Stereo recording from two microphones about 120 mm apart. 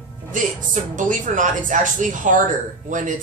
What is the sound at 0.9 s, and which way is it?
Speech, 90° right.